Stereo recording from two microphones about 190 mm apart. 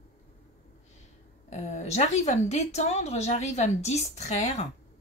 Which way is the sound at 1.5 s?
35° left (ahead or behind).